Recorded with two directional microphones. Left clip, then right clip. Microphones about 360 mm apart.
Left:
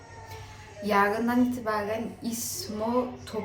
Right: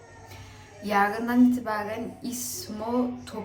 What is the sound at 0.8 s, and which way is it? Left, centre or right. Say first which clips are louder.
Speech: even; centre.